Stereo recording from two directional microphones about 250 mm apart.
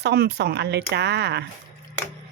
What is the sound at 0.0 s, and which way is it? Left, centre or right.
Speech, right.